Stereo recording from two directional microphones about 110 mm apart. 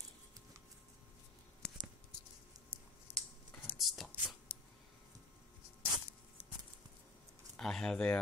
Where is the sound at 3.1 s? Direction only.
20° left (ahead or behind).